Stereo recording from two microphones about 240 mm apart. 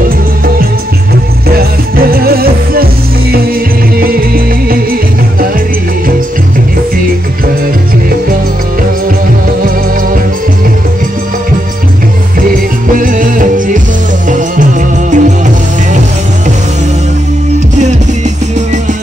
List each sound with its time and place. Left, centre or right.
1.6 s music: right
12.9 s music: right